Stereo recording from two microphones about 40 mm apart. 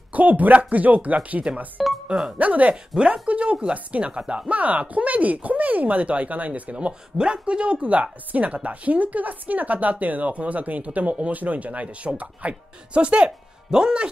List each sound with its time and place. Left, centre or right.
0.1 s speech: right
1.8 s speech: centre
2.3 s speech: right
2.9 s speech: centre
3.3 s speech: right
6.9 s speech: right
13.7 s speech: centre